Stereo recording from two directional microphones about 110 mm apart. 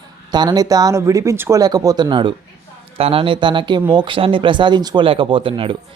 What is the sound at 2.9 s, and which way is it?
Speech, 60° right (ahead or behind).